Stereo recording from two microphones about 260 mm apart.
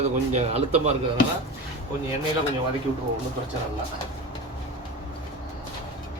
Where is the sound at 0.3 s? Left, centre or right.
Right.